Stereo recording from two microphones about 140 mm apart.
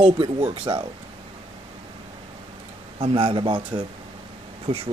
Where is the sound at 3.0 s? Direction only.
40° right (ahead or behind).